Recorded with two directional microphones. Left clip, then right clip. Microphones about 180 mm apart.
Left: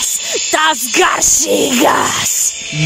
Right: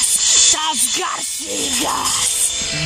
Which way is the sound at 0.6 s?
70° left (ahead or behind).